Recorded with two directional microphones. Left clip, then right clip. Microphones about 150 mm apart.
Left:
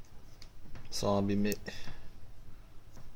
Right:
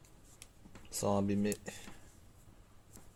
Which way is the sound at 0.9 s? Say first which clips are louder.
Left 2 dB; 25° right (ahead or behind).